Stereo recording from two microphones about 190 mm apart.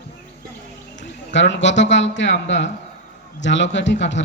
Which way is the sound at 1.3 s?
70° left (ahead or behind).